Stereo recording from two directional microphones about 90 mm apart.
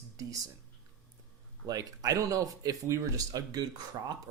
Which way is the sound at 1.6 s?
40° right (ahead or behind).